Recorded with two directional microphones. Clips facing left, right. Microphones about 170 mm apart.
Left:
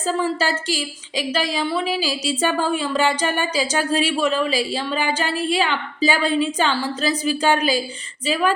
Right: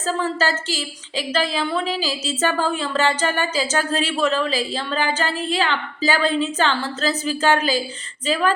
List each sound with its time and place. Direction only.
0.0 s a woman's voice: 15° left (ahead or behind)